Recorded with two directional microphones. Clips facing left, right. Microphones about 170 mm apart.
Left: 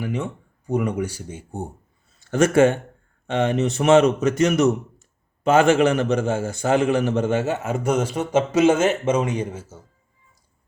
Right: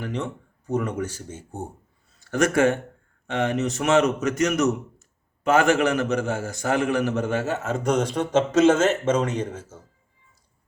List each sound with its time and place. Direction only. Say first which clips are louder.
0.0 s speech: left 3 dB; 10° left (ahead or behind)
2.3 s speech: left 4 dB; 30° left (ahead or behind); by 9.8 s 10° left (ahead or behind)